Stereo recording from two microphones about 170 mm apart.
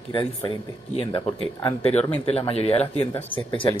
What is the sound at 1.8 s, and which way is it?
Speech, 35° left (ahead or behind).